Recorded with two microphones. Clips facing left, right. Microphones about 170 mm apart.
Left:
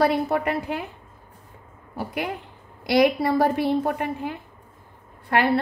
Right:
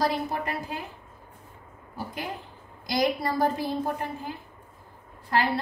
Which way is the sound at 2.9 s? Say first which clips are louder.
Left 7 dB; 65° left (ahead or behind).